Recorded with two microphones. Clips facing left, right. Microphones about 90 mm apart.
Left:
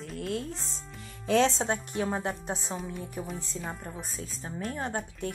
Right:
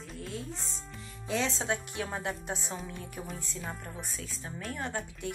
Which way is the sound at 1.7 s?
40° left (ahead or behind).